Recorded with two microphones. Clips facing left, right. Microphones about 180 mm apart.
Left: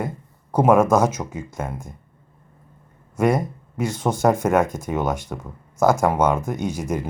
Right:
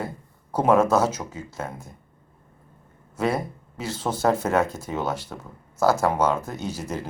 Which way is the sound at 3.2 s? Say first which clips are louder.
Left 5 dB; 15° left (ahead or behind).